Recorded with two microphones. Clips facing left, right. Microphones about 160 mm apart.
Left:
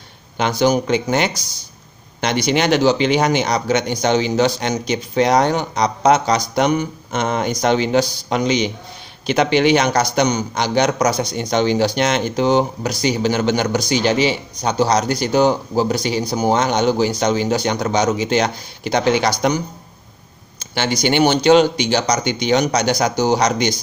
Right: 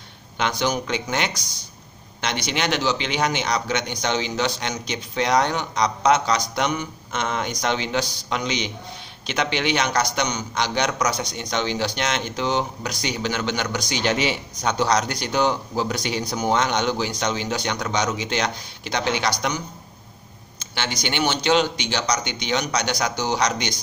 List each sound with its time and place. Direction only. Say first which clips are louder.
0.6 s speech: left 8 dB; 40° left (ahead or behind)
1.3 s speech: left 2 dB; 5° left (ahead or behind)
2.5 s speech: left 9 dB; 45° left (ahead or behind)
21.1 s speech: left 8 dB; 45° left (ahead or behind)